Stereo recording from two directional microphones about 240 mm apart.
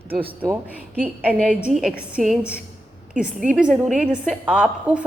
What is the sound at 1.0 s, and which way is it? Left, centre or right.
A woman's voice, centre.